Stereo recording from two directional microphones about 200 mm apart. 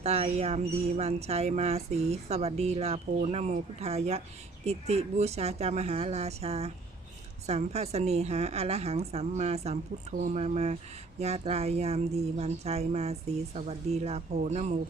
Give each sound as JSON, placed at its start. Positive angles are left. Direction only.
{"t": 0.0, "sound": "speech", "side_deg": -30}